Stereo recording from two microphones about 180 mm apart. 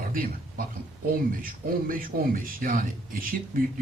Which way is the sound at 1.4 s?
50° right (ahead or behind).